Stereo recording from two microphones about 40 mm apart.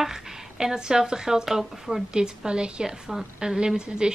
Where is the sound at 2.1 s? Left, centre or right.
Right.